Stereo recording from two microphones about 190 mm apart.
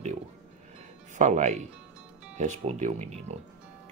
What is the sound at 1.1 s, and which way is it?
Speech, 40° right (ahead or behind).